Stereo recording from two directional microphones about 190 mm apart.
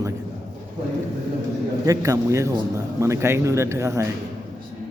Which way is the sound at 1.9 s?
15° right (ahead or behind).